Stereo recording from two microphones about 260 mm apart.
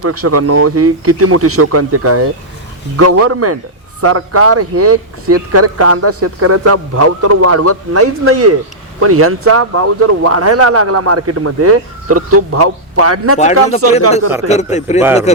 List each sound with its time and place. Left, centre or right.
0.0 s speech: right
13.4 s speech: left